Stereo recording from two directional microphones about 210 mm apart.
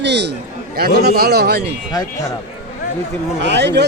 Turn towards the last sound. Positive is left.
turn(degrees=-55)  # may be behind; listen again after turning